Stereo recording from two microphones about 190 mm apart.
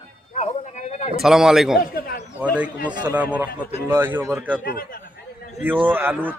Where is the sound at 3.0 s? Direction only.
5° right (ahead or behind).